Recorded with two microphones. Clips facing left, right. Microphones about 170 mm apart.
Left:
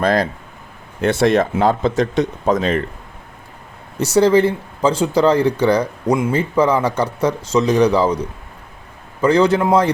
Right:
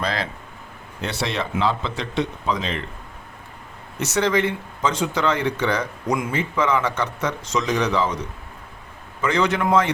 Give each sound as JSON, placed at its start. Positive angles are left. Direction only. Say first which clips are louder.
{"t": 0.0, "sound": "speech", "louder": "left 9 dB", "side_deg": 50}
{"t": 3.9, "sound": "speech", "louder": "left 8 dB", "side_deg": 35}
{"t": 9.2, "sound": "speech", "louder": "left 7 dB", "side_deg": 30}